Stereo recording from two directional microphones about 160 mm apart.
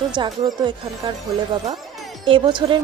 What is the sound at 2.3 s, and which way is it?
Speech, 30° right (ahead or behind).